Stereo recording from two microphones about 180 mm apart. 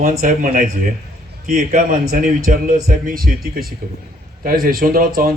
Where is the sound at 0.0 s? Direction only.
45° right (ahead or behind).